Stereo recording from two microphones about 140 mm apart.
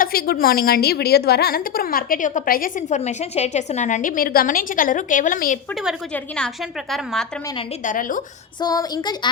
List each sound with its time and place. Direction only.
0.0 s a woman's voice: 90° left
3.0 s a woman's voice: 55° left (ahead or behind); by 5.5 s 70° left (ahead or behind)
6.9 s a woman's voice: centre (ahead or behind)
7.9 s a woman's voice: 70° left (ahead or behind)
8.6 s child singing: 30° left (ahead or behind)